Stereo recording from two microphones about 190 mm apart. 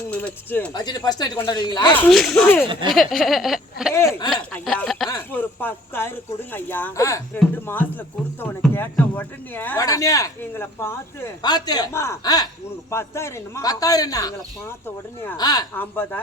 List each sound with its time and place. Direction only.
0.1 s speech: 10° left (ahead or behind)
0.7 s a man's voice: 20° left (ahead or behind)
1.9 s speech: 5° left (ahead or behind)
2.9 s a sound: centre (ahead or behind)
3.9 s speech: 15° left (ahead or behind)
4.5 s a sound: 5° left (ahead or behind)
5.0 s a man's voice: 15° left (ahead or behind)
15.4 s a man's voice: 20° left (ahead or behind)